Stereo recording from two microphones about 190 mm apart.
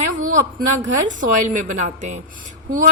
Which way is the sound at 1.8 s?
40° right (ahead or behind).